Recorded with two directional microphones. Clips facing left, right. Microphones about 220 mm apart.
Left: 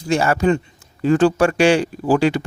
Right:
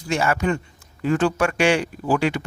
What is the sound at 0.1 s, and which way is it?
Speech, 35° left (ahead or behind).